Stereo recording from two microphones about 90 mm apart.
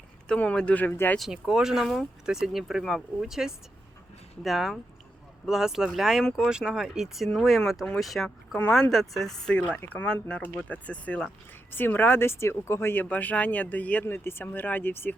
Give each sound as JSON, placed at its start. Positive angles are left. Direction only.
{"t": 0.3, "sound": "speech", "side_deg": 10}
{"t": 1.3, "sound": "speech", "side_deg": -5}